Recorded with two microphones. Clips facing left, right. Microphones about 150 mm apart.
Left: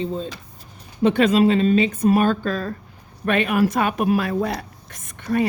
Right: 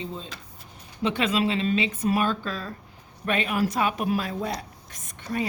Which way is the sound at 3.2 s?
60° left (ahead or behind).